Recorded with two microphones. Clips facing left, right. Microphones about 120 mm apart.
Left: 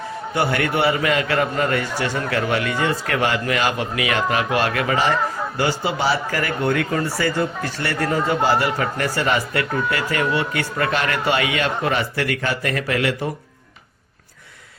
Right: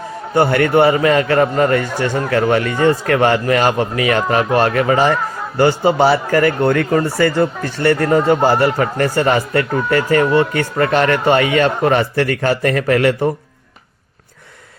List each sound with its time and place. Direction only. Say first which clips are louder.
0.3 s speech: right 8 dB; 50° right (ahead or behind)